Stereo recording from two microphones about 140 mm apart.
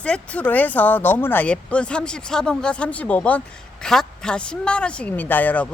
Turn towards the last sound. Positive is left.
turn(degrees=10)  # may be behind; listen again after turning